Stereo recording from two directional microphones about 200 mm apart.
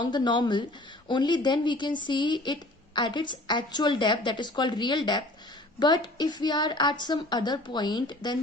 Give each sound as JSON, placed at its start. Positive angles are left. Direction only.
{"t": 0.0, "sound": "a woman's voice", "side_deg": 25}